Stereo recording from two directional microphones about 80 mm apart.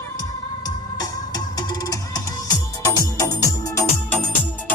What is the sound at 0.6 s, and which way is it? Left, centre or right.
Music, left.